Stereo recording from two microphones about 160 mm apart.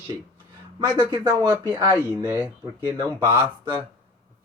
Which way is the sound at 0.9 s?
25° right (ahead or behind).